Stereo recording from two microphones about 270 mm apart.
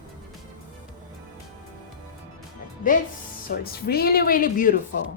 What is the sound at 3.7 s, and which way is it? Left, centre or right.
A woman's voice, left.